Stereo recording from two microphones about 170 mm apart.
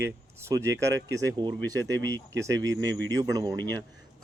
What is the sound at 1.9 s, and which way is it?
Speech, 90° right.